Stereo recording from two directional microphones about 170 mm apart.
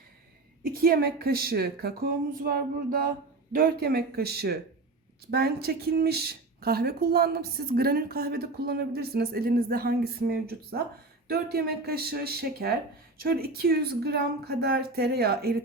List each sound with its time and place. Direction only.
0.6 s speech: 60° right (ahead or behind)